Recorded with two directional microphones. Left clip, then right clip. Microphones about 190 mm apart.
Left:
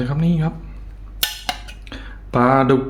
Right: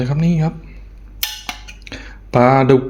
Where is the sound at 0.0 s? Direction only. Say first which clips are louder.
Right 2 dB; 20° right (ahead or behind).